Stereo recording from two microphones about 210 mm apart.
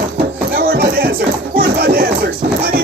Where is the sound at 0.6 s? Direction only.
45° right (ahead or behind).